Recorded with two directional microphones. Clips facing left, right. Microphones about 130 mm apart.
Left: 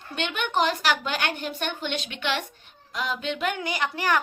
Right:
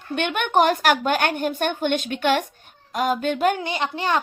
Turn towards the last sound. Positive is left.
turn(degrees=-25)  # may be behind; listen again after turning